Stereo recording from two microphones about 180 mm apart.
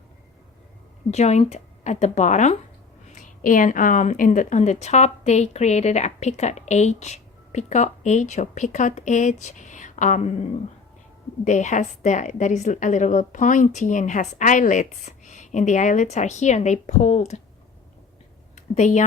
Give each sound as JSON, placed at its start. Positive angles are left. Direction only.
{"t": 1.1, "sound": "a woman's voice", "side_deg": 35}
{"t": 11.4, "sound": "a woman's voice", "side_deg": 45}
{"t": 18.5, "sound": "speech", "side_deg": 40}